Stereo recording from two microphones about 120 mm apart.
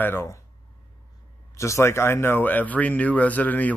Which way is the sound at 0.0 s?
20° left (ahead or behind).